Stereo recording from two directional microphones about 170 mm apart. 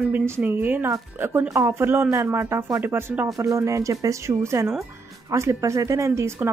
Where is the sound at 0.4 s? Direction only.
10° right (ahead or behind).